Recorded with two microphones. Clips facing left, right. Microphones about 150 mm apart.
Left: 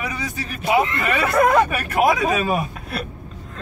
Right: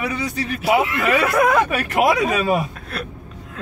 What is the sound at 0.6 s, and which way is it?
Speech, 5° right (ahead or behind).